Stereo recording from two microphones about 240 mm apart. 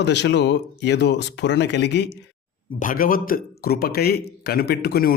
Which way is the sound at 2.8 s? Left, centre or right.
Left.